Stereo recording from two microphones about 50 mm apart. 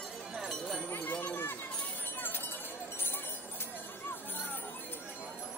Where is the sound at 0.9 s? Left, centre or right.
Left.